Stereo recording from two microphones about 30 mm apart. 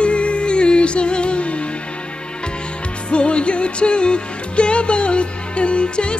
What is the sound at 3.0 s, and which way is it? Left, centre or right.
Music, left.